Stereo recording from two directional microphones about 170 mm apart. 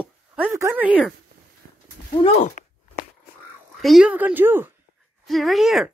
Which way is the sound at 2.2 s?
45° left (ahead or behind).